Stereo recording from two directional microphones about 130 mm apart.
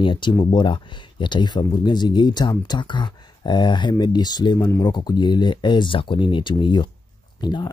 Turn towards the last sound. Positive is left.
turn(degrees=35)  # may be behind; listen again after turning